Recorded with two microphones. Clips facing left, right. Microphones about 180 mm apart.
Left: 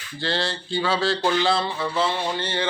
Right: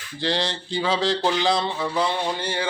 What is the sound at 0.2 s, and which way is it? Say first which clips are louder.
Speech: right 1 dB; 15° right (ahead or behind).